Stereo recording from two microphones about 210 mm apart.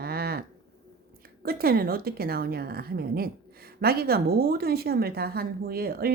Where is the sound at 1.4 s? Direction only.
45° right (ahead or behind).